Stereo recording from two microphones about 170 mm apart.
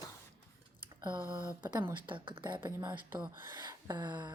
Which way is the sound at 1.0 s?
25° right (ahead or behind).